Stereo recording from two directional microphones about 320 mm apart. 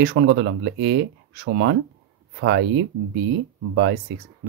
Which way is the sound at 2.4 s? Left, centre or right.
Right.